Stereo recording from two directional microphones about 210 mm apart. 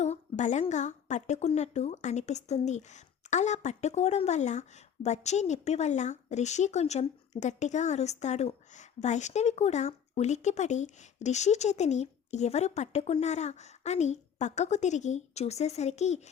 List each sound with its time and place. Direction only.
0.0 s a woman's voice: 35° left (ahead or behind)